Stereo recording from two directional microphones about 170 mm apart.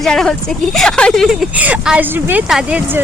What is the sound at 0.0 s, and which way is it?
A woman's voice, centre (ahead or behind).